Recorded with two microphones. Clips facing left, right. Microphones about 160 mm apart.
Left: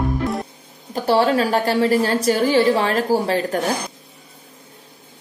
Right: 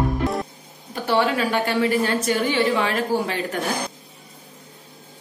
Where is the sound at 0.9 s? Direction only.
40° left (ahead or behind).